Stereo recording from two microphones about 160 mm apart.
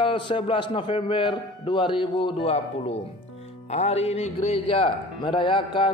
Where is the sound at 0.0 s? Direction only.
30° left (ahead or behind).